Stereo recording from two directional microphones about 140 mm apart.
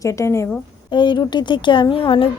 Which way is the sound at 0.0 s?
20° left (ahead or behind).